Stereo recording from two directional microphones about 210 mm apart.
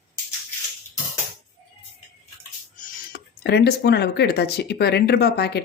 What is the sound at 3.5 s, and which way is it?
Speech, 50° left (ahead or behind).